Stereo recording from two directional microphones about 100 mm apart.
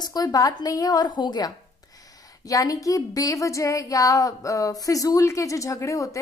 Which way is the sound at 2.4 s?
35° left (ahead or behind).